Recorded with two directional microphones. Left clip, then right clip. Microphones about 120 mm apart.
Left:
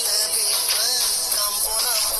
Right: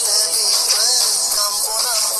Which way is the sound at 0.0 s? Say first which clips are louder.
Right 5 dB; 65° right (ahead or behind).